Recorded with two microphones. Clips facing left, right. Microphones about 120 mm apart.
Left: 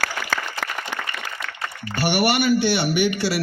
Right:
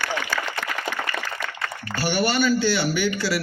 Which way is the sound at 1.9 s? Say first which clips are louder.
Left 3 dB; 70° left (ahead or behind).